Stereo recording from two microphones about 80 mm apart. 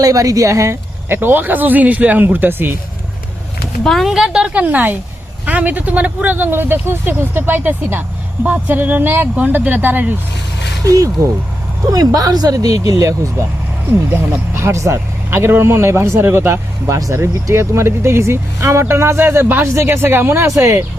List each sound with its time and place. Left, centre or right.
0.0 s speech: right
3.8 s speech: centre
4.1 s speech: centre; by 10.2 s right
10.8 s speech: right
14.1 s speech: right
16.8 s speech: right